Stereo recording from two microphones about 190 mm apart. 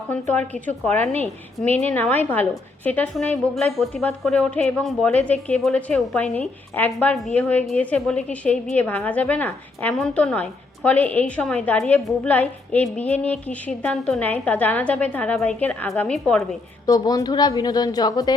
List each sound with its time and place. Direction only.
0.1 s a woman's voice: 10° left (ahead or behind)
16.8 s a woman's voice: 20° left (ahead or behind)